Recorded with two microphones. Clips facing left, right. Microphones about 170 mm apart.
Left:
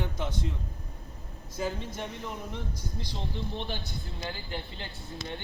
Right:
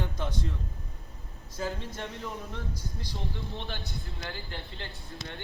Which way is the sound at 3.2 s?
20° left (ahead or behind).